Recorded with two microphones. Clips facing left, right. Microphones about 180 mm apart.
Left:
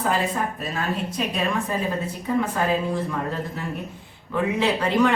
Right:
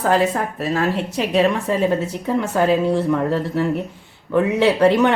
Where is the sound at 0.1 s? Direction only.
80° right.